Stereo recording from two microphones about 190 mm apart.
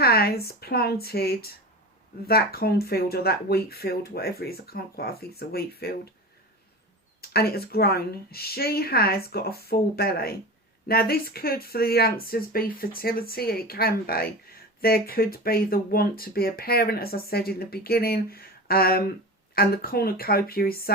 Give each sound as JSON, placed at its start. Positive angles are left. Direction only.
{"t": 0.0, "sound": "speech", "side_deg": 55}
{"t": 7.2, "sound": "speech", "side_deg": 55}